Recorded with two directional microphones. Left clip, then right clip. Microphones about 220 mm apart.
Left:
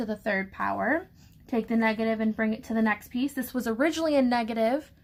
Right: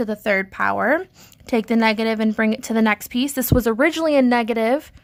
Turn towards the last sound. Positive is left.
turn(degrees=-35)  # may be behind; listen again after turning